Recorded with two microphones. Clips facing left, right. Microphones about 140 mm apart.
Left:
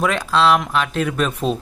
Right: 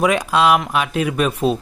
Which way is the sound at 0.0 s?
15° right (ahead or behind).